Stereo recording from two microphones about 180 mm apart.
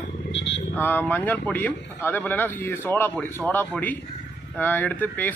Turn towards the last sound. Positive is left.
turn(degrees=10)  # may be behind; listen again after turning